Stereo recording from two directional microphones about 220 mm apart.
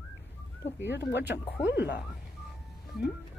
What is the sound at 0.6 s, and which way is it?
Speech, 50° left (ahead or behind).